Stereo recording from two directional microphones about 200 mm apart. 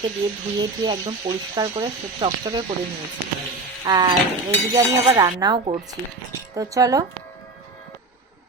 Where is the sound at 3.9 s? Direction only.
20° right (ahead or behind).